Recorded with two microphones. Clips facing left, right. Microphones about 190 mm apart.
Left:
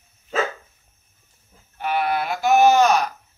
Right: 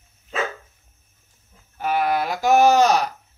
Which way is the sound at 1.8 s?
40° right (ahead or behind).